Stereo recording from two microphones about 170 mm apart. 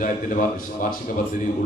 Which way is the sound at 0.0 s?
50° left (ahead or behind).